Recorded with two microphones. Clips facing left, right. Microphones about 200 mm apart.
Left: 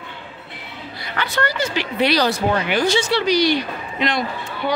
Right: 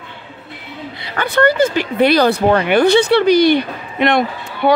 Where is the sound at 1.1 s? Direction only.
55° right (ahead or behind).